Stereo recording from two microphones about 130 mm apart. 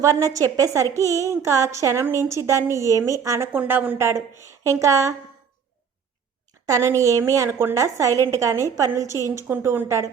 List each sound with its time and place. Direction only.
0.0 s a woman's voice: 25° right (ahead or behind)
6.7 s a woman's voice: 25° right (ahead or behind)